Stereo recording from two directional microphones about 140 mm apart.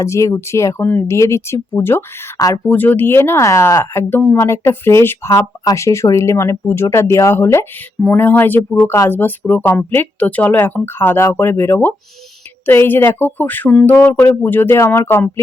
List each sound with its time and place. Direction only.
0.0 s speech: 20° left (ahead or behind)